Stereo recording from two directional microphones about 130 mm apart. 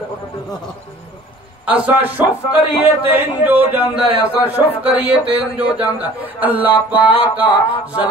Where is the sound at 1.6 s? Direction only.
10° right (ahead or behind).